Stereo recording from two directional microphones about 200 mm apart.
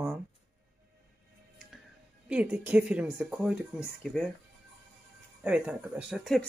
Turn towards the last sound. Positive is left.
turn(degrees=0)  # may be behind; listen again after turning